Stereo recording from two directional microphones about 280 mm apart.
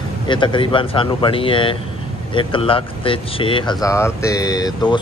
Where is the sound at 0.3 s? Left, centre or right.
Centre.